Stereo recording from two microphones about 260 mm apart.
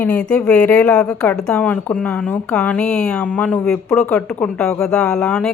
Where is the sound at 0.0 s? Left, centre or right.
Centre.